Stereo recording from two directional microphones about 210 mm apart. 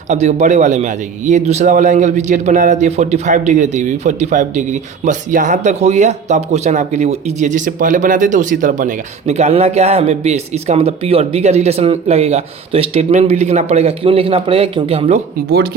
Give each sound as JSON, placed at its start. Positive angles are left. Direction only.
{"t": 0.1, "sound": "a man's voice", "side_deg": -30}